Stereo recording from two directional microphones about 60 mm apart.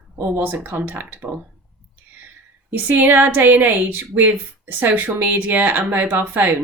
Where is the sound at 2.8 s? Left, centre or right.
Right.